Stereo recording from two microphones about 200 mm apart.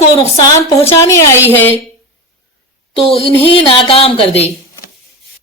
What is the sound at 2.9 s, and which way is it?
A woman's voice, 25° left (ahead or behind).